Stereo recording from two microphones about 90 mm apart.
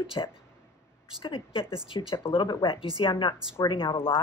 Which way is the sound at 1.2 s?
75° left (ahead or behind).